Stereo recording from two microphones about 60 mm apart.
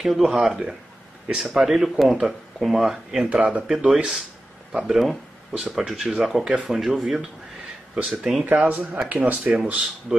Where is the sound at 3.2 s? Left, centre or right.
Right.